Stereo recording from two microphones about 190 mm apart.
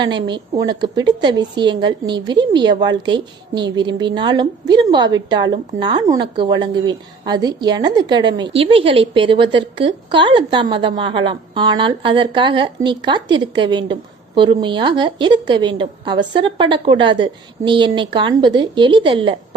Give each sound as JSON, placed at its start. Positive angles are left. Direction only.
{"t": 0.0, "sound": "a woman's voice", "side_deg": -25}